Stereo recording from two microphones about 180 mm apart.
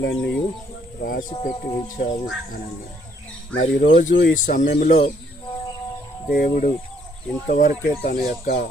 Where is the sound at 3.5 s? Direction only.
90° left.